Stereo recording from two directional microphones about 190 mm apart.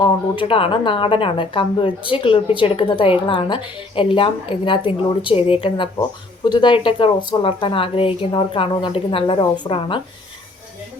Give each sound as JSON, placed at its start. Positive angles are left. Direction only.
{"t": 0.0, "sound": "a woman's voice", "side_deg": 25}